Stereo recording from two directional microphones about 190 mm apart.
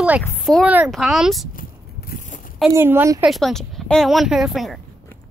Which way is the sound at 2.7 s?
15° right (ahead or behind).